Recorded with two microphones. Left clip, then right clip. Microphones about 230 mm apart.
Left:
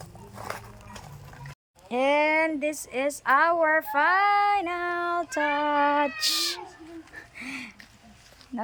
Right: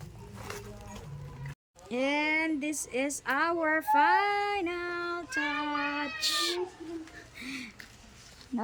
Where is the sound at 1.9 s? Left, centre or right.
Centre.